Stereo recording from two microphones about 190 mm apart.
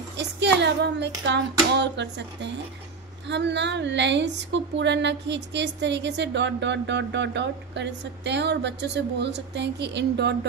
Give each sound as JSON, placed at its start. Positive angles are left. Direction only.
{"t": 0.4, "sound": "a woman's voice", "side_deg": -65}